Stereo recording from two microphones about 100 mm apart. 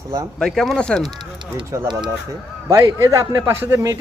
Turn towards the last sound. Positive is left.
turn(degrees=-25)  # may be behind; listen again after turning